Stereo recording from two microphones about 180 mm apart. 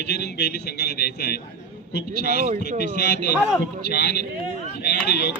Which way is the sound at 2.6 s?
70° left (ahead or behind).